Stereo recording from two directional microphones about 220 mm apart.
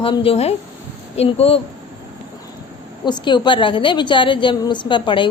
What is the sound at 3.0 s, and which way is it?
A woman's voice, 20° left (ahead or behind).